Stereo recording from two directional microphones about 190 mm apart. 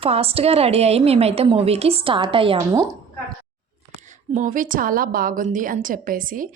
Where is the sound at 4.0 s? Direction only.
40° right (ahead or behind).